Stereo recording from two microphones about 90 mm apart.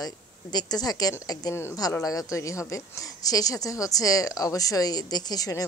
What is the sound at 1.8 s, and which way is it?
Speech, 40° left (ahead or behind).